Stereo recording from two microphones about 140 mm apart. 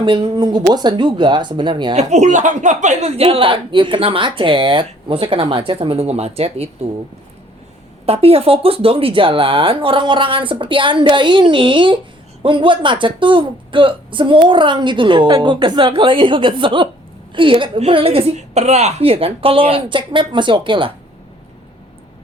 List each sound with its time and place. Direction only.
0.0 s speech: 40° right (ahead or behind)
2.0 s speech: 55° right (ahead or behind)
8.0 s speech: 45° right (ahead or behind)